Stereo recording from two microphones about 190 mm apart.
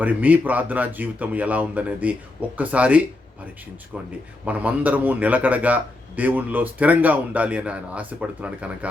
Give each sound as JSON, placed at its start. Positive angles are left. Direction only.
{"t": 0.0, "sound": "a man's voice", "side_deg": -10}